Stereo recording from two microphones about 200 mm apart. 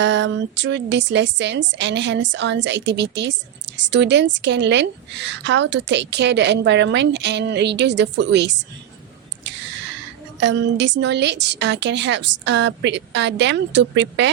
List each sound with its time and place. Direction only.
0.0 s speech: 65° right (ahead or behind)
10.4 s speech: 65° right (ahead or behind)